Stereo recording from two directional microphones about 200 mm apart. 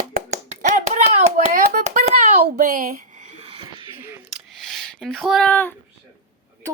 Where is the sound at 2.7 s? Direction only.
40° right (ahead or behind); by 3.9 s 25° right (ahead or behind).